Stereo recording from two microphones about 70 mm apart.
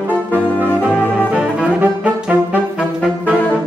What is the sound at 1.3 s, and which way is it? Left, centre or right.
Music, centre.